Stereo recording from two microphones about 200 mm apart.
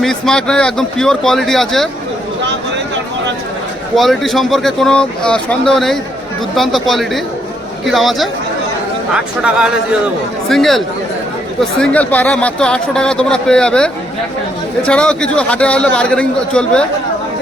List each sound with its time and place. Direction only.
0.0 s speech: 5° left (ahead or behind)
2.4 s a sound: 60° right (ahead or behind)
3.9 s speech: centre (ahead or behind)